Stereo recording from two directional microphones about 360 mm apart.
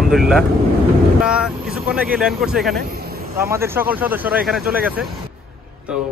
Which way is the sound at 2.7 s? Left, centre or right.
Right.